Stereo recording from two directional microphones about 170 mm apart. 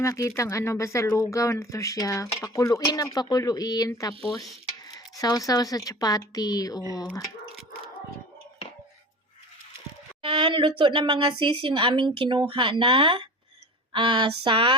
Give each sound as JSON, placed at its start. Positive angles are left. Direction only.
{"t": 0.0, "sound": "speech", "side_deg": 15}
{"t": 10.2, "sound": "a woman's voice", "side_deg": -30}